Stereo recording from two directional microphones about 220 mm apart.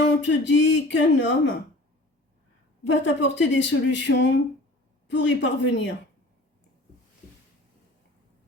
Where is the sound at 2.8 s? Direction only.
55° left (ahead or behind).